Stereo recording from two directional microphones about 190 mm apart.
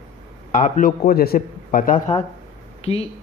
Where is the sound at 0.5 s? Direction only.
45° left (ahead or behind).